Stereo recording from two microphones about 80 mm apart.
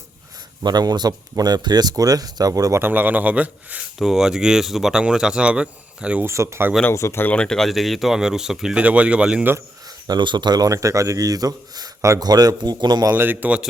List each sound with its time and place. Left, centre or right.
0.6 s speech: right
2.8 s a man's voice: right
3.9 s speech: centre
6.2 s speech: right
6.9 s speech: left
7.3 s speech: centre
10.1 s a man's voice: right
13.1 s a man's voice: right